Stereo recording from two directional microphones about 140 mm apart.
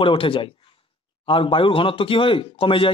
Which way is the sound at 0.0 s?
40° left (ahead or behind).